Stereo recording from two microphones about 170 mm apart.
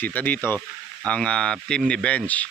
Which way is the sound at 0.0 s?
10° left (ahead or behind).